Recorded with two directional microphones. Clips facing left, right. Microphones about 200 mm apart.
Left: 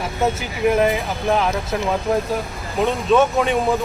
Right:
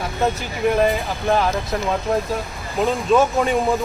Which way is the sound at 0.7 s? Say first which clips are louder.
Even; 5° left (ahead or behind).